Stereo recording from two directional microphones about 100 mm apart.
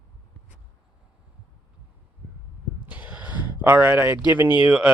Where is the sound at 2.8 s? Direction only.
15° right (ahead or behind).